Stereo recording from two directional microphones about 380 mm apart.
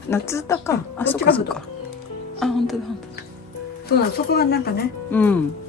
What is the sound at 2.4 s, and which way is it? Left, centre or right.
Speech, centre.